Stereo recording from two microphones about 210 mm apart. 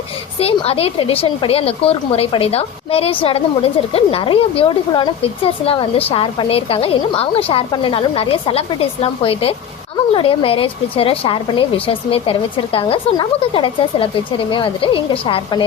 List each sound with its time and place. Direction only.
0.3 s a woman's voice: 30° left (ahead or behind)